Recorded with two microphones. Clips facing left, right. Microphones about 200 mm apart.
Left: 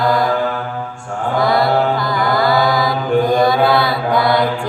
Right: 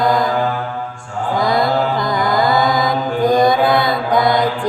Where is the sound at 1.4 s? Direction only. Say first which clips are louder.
Left 2 dB; 20° right (ahead or behind).